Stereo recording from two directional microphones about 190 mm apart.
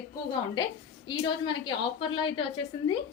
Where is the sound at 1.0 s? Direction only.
25° left (ahead or behind).